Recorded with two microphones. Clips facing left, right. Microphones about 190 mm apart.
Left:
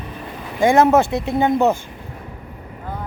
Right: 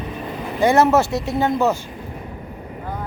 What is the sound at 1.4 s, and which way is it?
Speech, 20° left (ahead or behind).